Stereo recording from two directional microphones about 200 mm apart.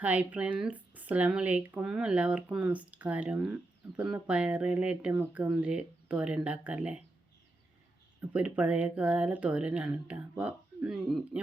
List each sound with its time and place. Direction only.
0.0 s speech: 5° right (ahead or behind)
8.3 s speech: 5° right (ahead or behind)